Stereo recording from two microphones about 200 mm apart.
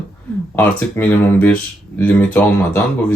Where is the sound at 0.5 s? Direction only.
10° left (ahead or behind).